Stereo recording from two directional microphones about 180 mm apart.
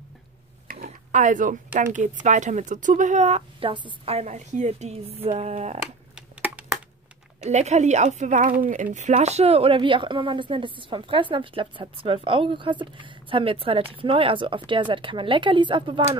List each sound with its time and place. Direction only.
0.8 s speech: 45° right (ahead or behind)
6.1 s a sound: 5° right (ahead or behind)
7.4 s speech: 40° right (ahead or behind)